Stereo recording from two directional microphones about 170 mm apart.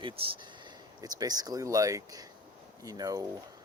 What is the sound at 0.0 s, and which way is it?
Speech, 30° right (ahead or behind).